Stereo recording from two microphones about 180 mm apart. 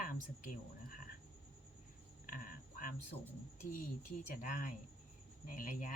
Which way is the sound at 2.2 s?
50° left (ahead or behind).